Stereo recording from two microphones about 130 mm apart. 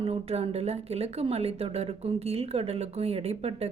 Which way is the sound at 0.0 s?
50° right (ahead or behind).